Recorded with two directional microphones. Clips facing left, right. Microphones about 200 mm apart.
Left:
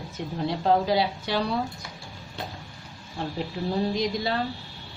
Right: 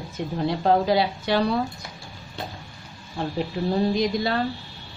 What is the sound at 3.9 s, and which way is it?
Speech, 60° right (ahead or behind).